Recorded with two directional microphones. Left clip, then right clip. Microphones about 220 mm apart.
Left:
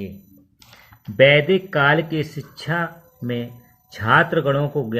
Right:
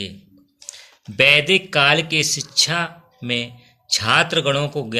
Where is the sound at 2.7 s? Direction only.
15° left (ahead or behind).